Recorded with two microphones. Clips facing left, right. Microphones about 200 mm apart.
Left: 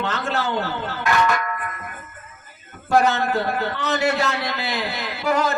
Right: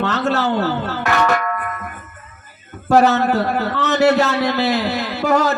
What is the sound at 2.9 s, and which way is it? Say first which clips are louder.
A man's voice: right 5 dB; 40° right (ahead or behind).